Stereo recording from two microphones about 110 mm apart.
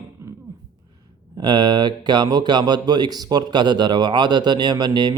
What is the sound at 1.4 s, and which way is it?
Speech, 40° right (ahead or behind).